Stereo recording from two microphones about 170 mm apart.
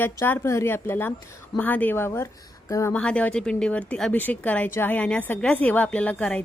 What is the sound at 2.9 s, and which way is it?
Speech, 5° left (ahead or behind).